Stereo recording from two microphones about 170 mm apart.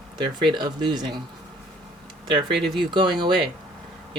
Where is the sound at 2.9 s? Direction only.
25° right (ahead or behind).